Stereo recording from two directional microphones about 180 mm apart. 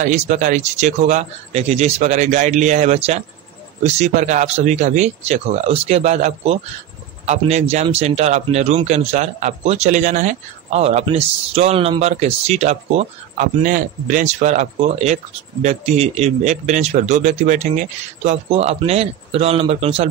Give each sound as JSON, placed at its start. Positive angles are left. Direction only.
{"t": 0.0, "sound": "speech", "side_deg": -40}